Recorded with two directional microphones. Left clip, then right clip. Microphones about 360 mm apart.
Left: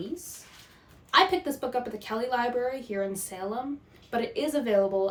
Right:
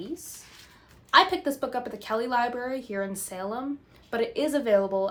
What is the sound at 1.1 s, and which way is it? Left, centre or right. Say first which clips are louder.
A woman's voice: right 2 dB; centre.